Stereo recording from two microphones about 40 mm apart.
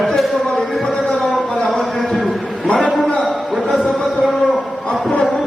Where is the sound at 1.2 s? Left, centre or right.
Centre.